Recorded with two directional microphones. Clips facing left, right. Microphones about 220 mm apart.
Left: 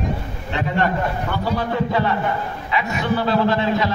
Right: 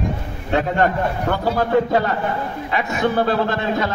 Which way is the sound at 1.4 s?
45° right (ahead or behind).